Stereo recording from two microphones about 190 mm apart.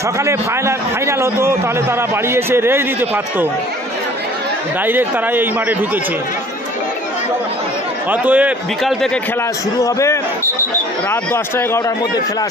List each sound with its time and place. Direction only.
0.2 s a man's voice: 15° right (ahead or behind)
4.8 s a man's voice: 10° right (ahead or behind)
8.1 s a man's voice: 10° right (ahead or behind)
9.8 s speech: 15° left (ahead or behind)